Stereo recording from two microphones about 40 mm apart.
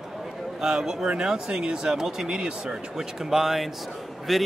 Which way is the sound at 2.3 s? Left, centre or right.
Right.